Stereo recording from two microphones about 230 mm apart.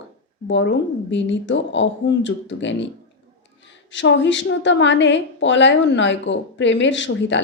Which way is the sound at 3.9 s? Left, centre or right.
Left.